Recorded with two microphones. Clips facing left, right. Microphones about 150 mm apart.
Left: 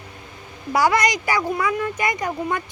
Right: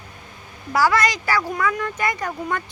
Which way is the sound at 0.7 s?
15° left (ahead or behind).